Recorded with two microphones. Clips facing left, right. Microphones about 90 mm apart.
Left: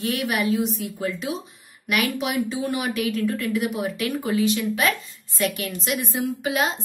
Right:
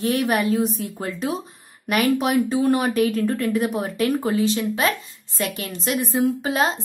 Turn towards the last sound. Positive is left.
turn(degrees=-35)  # may be behind; listen again after turning